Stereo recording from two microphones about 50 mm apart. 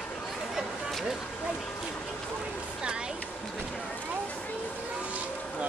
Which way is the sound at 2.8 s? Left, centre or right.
Centre.